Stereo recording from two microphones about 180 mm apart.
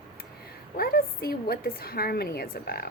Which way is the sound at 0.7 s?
55° left (ahead or behind).